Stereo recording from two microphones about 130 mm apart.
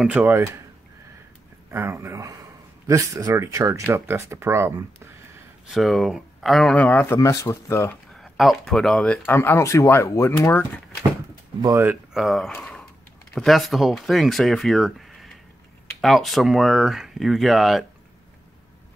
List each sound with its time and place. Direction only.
0.0 s speech: 10° right (ahead or behind)
1.7 s speech: 20° right (ahead or behind)
5.7 s speech: centre (ahead or behind)
6.9 s speech: 15° left (ahead or behind)
7.9 s speech: 5° left (ahead or behind); by 10.7 s 20° left (ahead or behind)
11.6 s speech: 20° right (ahead or behind)
12.1 s speech: centre (ahead or behind)
12.5 s a sound: 10° left (ahead or behind)
13.3 s speech: centre (ahead or behind)